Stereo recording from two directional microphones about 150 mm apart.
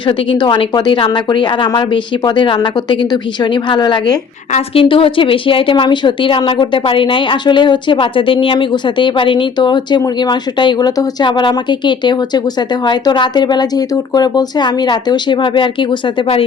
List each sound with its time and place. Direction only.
0.0 s speech: 35° left (ahead or behind)